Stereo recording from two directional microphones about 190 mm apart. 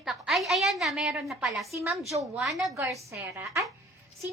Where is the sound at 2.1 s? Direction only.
15° right (ahead or behind).